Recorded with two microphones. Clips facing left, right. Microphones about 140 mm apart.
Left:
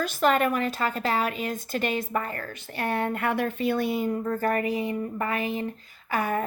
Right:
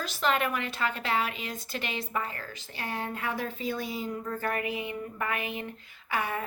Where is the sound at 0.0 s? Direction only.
50° left (ahead or behind).